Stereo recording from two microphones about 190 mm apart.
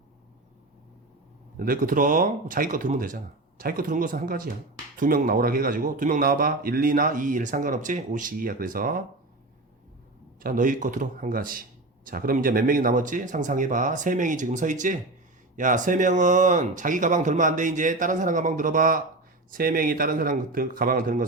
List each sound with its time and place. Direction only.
1.5 s speech: 50° right (ahead or behind)
10.4 s speech: 45° right (ahead or behind)